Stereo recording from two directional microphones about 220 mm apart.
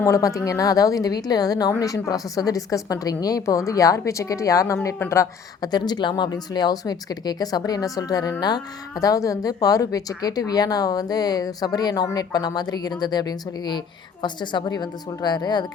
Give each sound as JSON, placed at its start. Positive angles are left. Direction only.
{"t": 0.0, "sound": "a woman's voice", "side_deg": 15}